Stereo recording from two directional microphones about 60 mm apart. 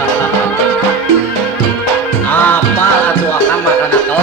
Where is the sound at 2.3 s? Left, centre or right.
Left.